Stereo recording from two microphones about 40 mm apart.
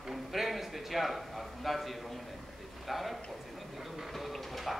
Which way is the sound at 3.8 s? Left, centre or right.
Centre.